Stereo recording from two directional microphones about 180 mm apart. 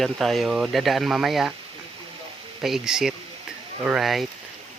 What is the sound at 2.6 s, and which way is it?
Speech, centre (ahead or behind).